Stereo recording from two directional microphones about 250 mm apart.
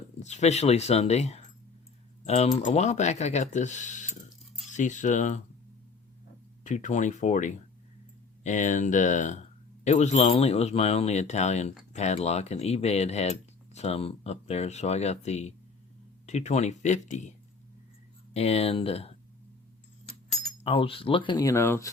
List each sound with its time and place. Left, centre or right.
0.2 s speech: left
6.7 s speech: left
18.3 s speech: left
20.7 s speech: left